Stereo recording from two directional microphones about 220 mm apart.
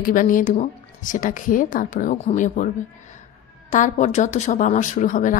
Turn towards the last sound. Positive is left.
turn(degrees=35)  # may be behind; listen again after turning